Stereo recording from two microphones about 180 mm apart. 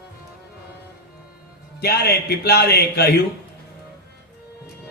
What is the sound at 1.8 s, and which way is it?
A man's voice, 60° left (ahead or behind).